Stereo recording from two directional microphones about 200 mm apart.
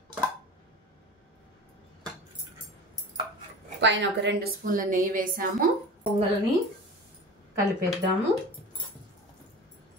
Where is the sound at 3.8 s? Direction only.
60° right (ahead or behind).